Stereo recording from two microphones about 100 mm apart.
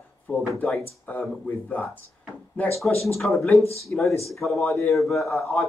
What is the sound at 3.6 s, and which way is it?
Speech, 90° left.